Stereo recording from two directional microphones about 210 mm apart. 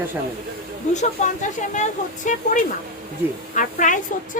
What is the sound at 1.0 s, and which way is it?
Speech, 35° left (ahead or behind).